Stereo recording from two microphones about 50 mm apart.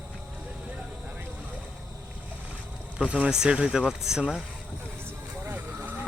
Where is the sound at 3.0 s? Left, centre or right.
Right.